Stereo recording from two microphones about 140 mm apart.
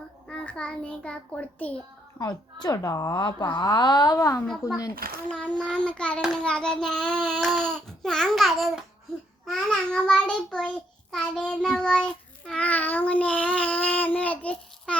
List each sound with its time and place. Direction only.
0.3 s a child's voice: 5° left (ahead or behind)
2.1 s a woman's voice: 30° left (ahead or behind)
4.9 s a child's voice: 90° right
5.3 s a child's voice: 5° left (ahead or behind)
11.1 s child singing: 5° left (ahead or behind)